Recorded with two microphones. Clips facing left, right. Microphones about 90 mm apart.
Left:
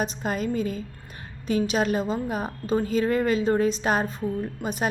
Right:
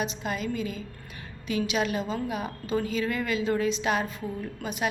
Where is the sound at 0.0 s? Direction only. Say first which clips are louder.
Left 4 dB; 40° left (ahead or behind).